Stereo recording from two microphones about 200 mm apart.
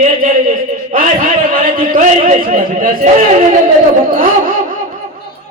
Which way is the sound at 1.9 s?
40° right (ahead or behind).